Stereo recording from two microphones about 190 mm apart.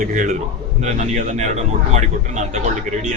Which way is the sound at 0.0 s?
40° right (ahead or behind).